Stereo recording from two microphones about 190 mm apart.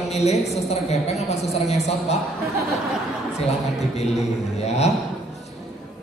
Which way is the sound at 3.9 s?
35° left (ahead or behind).